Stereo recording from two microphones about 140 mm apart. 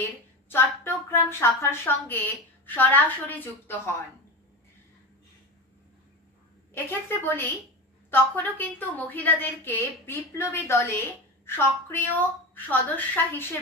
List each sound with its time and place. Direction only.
0.5 s a woman's voice: 15° left (ahead or behind)
6.7 s a woman's voice: 15° left (ahead or behind)